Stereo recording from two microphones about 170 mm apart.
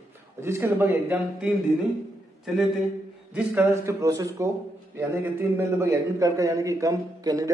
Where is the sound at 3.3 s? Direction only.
10° right (ahead or behind).